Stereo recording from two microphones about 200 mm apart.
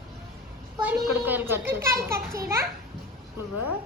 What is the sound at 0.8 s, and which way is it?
A child's voice, 10° right (ahead or behind).